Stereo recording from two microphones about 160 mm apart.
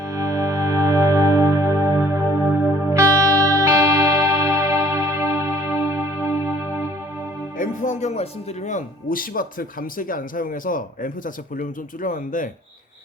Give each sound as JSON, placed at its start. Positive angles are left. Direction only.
{"t": 0.1, "sound": "music", "side_deg": -20}
{"t": 7.6, "sound": "speech", "side_deg": 50}